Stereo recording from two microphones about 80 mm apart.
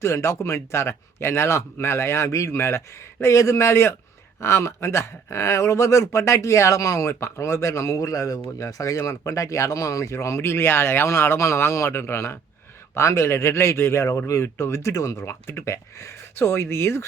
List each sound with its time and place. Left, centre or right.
0.0 s a man's voice: left